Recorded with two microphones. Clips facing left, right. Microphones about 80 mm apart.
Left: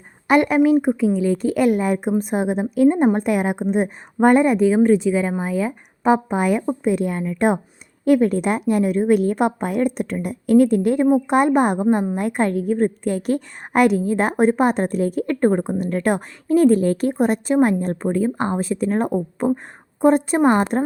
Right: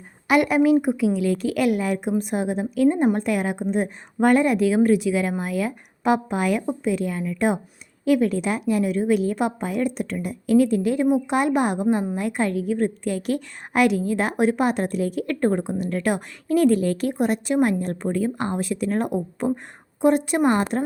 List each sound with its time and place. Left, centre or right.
0.3 s speech: left
1.5 s a woman's voice: left
4.4 s speech: centre
5.1 s speech: centre
6.0 s a woman's voice: left